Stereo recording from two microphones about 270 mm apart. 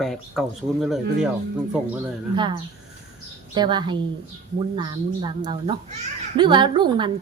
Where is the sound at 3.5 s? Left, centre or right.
Centre.